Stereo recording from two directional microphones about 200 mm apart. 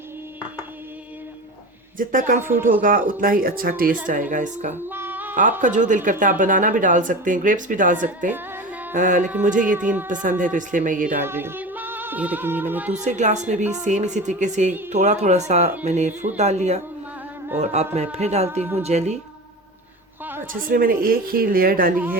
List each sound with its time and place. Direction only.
2.0 s a woman's voice: 40° right (ahead or behind)
4.9 s a sound: 10° right (ahead or behind)
5.4 s a woman's voice: 40° right (ahead or behind)
9.7 s speech: 10° right (ahead or behind)
10.1 s a woman's voice: 40° right (ahead or behind)
11.2 s music: 10° right (ahead or behind)
12.9 s a woman's voice: 35° right (ahead or behind)
20.5 s speech: 45° right (ahead or behind)